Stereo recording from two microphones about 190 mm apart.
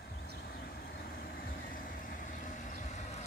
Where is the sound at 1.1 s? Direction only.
50° left (ahead or behind).